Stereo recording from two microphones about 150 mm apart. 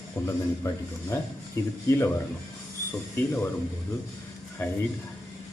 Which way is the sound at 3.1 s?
10° left (ahead or behind).